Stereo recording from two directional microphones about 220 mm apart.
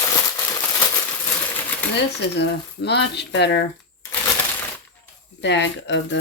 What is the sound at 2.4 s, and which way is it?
Speech, 50° left (ahead or behind).